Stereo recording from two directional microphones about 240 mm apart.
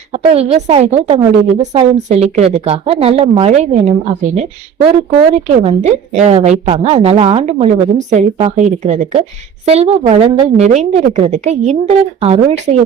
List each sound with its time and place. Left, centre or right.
0.1 s a woman's voice: right